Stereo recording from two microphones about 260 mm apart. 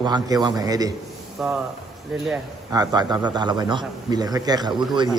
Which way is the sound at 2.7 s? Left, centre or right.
Centre.